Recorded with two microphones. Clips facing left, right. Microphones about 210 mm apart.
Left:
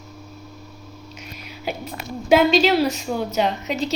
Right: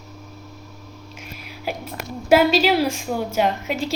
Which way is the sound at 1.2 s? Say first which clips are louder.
Even; 5° right (ahead or behind).